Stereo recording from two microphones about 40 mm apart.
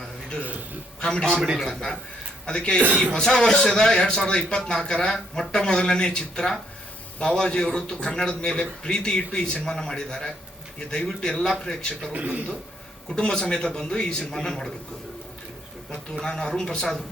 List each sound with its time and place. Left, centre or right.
1.0 s speech: left
1.5 s a man's voice: centre
2.5 s a man's voice: left
12.1 s a man's voice: right
13.1 s a man's voice: centre
16.2 s a man's voice: centre